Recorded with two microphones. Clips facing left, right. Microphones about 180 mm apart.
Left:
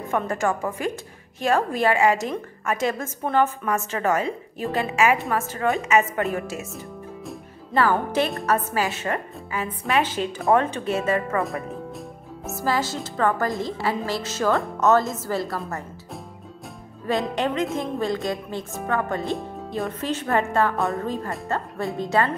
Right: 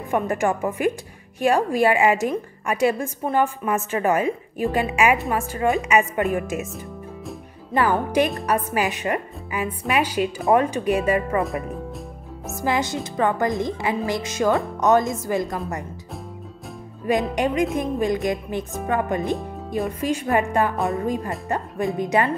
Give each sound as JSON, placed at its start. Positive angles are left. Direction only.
{"t": 0.1, "sound": "a woman's voice", "side_deg": -15}
{"t": 7.7, "sound": "a woman's voice", "side_deg": -15}
{"t": 11.3, "sound": "speech", "side_deg": 0}
{"t": 12.6, "sound": "a woman's voice", "side_deg": -20}
{"t": 17.0, "sound": "a woman's voice", "side_deg": -15}
{"t": 20.7, "sound": "speech", "side_deg": 0}
{"t": 21.0, "sound": "a woman's voice", "side_deg": -15}